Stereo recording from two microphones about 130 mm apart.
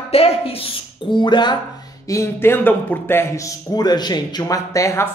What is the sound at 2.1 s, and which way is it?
A man's voice, 20° left (ahead or behind).